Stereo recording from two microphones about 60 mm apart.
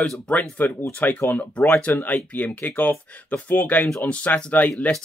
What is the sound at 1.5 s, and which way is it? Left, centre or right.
Speech, left.